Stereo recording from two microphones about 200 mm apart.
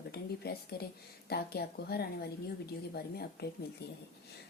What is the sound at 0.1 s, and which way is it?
A woman's voice, 50° left (ahead or behind).